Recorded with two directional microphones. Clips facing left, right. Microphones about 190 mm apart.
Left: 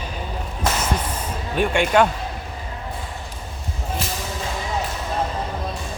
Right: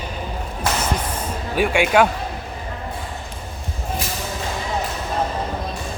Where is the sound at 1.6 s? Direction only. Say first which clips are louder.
Right 1 dB; 5° right (ahead or behind).